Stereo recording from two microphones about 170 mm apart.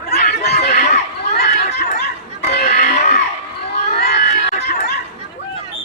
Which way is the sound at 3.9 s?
70° left (ahead or behind).